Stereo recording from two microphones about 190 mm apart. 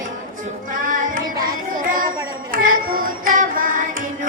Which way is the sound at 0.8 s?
45° right (ahead or behind).